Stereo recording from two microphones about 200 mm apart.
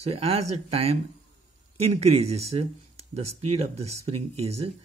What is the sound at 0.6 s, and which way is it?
Speech, 30° right (ahead or behind).